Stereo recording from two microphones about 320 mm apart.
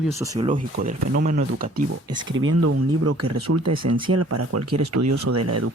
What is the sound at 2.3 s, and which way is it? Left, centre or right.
Speech, right.